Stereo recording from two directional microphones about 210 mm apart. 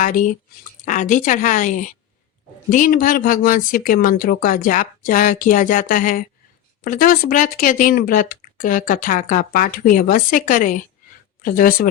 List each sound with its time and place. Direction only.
0.0 s speech: 40° left (ahead or behind)